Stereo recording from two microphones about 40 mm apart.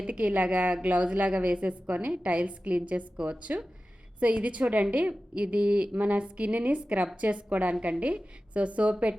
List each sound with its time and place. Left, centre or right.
0.1 s a woman's voice: right